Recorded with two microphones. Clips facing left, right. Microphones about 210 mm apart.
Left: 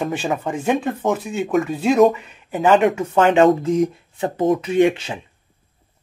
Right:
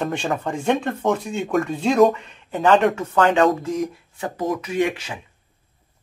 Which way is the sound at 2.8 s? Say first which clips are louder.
Left 2 dB; 20° left (ahead or behind).